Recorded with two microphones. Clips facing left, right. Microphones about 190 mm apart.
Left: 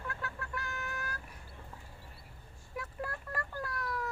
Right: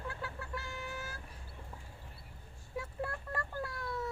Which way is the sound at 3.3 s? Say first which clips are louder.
Even; 25° right (ahead or behind).